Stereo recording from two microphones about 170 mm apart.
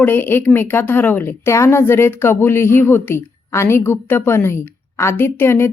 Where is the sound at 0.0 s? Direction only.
10° left (ahead or behind).